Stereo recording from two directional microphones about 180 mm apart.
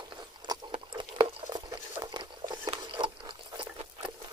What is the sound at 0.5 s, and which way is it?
Patter, 30° right (ahead or behind).